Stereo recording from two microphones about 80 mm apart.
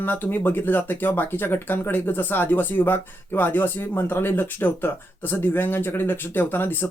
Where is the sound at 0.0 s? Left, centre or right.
Left.